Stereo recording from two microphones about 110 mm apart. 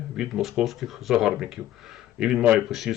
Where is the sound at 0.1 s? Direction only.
5° right (ahead or behind).